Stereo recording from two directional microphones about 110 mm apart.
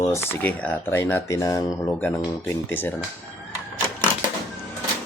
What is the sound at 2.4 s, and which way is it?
Speech, 20° left (ahead or behind).